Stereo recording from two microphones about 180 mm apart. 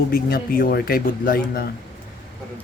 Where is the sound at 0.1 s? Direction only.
55° left (ahead or behind).